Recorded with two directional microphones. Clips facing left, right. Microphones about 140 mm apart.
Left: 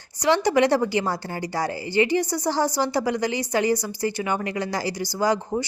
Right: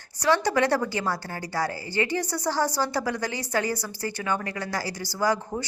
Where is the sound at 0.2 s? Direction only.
15° left (ahead or behind).